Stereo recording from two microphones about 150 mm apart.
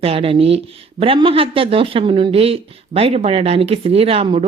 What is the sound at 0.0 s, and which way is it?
Speech, 40° right (ahead or behind).